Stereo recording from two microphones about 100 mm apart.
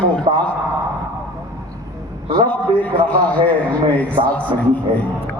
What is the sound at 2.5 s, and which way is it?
A man's voice, 15° left (ahead or behind).